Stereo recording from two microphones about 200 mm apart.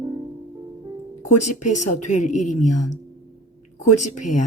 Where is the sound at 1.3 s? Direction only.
35° left (ahead or behind).